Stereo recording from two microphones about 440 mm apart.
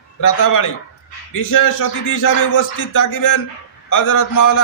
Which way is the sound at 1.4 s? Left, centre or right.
Left.